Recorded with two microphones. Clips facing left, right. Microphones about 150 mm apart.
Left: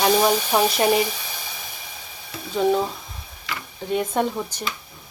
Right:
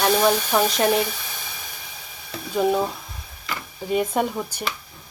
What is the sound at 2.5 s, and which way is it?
Speech, 5° right (ahead or behind).